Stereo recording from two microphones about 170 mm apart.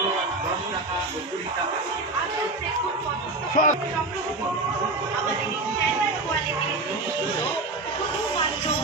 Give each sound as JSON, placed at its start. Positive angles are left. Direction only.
{"t": 3.5, "sound": "speech", "side_deg": 50}